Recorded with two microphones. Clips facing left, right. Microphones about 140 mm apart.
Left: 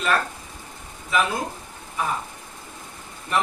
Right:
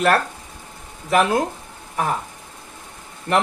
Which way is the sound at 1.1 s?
70° right (ahead or behind).